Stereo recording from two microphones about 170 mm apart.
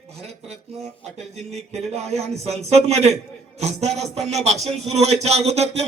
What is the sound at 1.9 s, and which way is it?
Speech, 40° right (ahead or behind).